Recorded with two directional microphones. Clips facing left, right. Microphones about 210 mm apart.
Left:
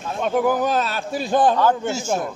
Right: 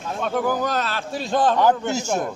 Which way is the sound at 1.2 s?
15° left (ahead or behind).